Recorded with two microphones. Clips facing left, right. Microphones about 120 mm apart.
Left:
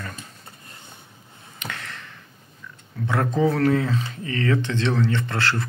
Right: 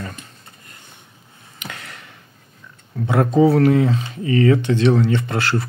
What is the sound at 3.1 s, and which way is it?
Speech, 15° right (ahead or behind).